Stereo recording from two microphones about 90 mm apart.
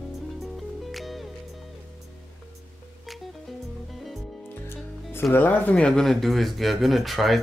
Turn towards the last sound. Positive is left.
turn(degrees=0)  # may be behind; listen again after turning